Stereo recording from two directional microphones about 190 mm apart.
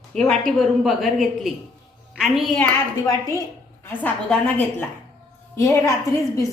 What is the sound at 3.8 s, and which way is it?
A woman's voice, 10° left (ahead or behind).